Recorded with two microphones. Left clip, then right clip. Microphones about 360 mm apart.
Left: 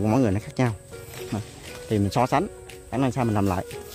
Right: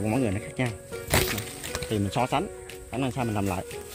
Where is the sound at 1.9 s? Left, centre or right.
Centre.